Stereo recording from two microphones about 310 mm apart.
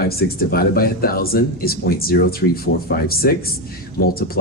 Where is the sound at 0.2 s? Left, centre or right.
Left.